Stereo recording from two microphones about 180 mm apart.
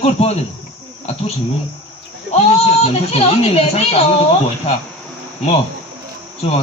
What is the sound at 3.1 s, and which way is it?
Speech, 35° left (ahead or behind).